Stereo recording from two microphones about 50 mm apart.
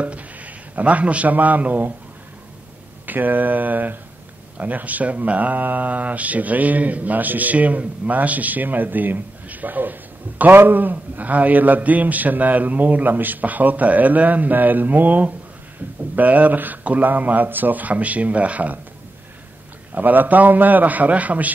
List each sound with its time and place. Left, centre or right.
0.0 s a man's voice: right
3.1 s speech: right
19.9 s speech: right